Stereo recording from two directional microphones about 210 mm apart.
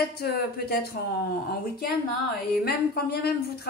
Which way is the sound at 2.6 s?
50° left (ahead or behind).